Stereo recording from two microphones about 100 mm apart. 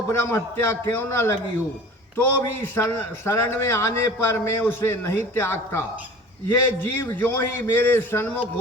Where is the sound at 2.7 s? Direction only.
25° left (ahead or behind).